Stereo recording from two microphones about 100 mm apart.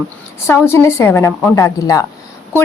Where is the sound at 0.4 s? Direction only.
25° left (ahead or behind).